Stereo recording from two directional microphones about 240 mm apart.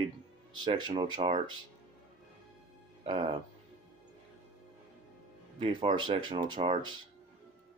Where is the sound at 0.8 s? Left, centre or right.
Centre.